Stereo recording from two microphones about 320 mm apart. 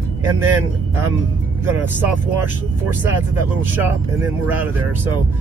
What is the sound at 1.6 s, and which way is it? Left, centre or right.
Speech, centre.